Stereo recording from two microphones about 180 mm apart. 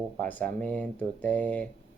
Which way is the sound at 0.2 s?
10° left (ahead or behind).